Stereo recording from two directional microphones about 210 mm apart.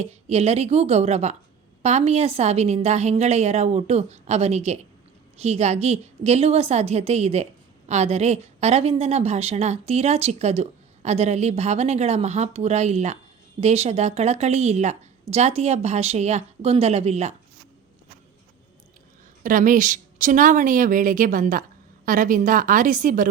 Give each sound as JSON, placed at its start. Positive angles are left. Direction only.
{"t": 0.0, "sound": "a woman's voice", "side_deg": -30}
{"t": 19.4, "sound": "a woman's voice", "side_deg": -40}